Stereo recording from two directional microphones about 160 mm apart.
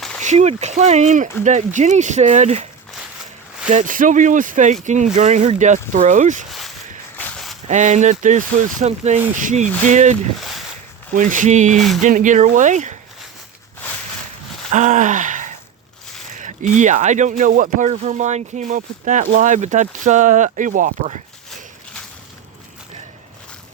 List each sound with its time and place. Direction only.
0.2 s speech: 45° right (ahead or behind)
3.7 s speech: 55° right (ahead or behind)
6.5 s a sound: centre (ahead or behind)
7.2 s walk: 10° left (ahead or behind)
7.7 s speech: 50° right (ahead or behind)
9.6 s speech: 10° left (ahead or behind)
9.9 s speech: 50° right (ahead or behind)
14.7 s gasp: 50° right (ahead or behind)
16.4 s speech: 50° right (ahead or behind)